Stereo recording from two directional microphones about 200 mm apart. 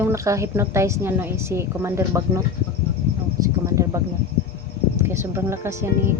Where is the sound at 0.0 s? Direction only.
15° right (ahead or behind).